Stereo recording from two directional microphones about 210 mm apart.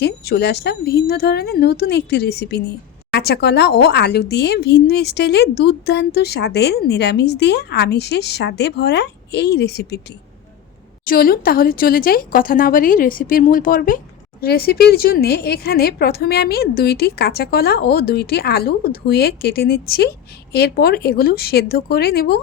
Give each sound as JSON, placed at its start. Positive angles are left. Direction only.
{"t": 0.0, "sound": "a woman's voice", "side_deg": 50}
{"t": 11.0, "sound": "a woman's voice", "side_deg": 45}